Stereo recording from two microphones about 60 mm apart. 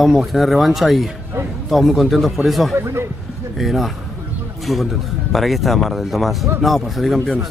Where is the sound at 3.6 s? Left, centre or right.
Centre.